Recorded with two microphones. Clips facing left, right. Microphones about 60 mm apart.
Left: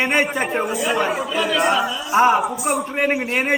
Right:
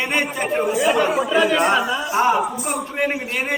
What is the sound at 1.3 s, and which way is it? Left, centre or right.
Speech, right.